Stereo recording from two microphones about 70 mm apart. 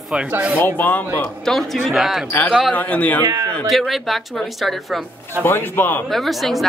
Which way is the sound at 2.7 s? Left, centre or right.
Left.